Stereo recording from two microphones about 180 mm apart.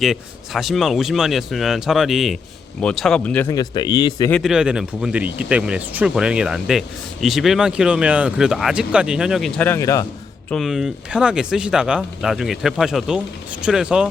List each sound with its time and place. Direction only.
0.0 s speech: centre (ahead or behind)
3.5 s speech: 20° left (ahead or behind)
4.3 s speech: centre (ahead or behind)
9.6 s a man's voice: 15° left (ahead or behind)
10.5 s speech: centre (ahead or behind)